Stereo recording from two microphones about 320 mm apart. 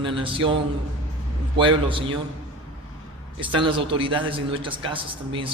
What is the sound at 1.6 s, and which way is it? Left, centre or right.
Speech, centre.